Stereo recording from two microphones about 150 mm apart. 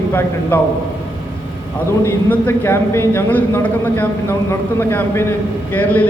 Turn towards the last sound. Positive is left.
turn(degrees=10)  # may be behind; listen again after turning